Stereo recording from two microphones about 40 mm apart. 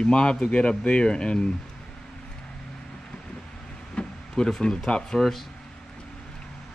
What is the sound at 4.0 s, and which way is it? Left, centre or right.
Speech, centre.